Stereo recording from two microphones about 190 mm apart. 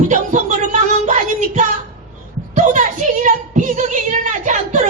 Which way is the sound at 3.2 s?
40° right (ahead or behind).